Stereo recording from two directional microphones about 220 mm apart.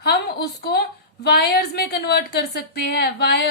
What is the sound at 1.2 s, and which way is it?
A woman's voice, 45° left (ahead or behind).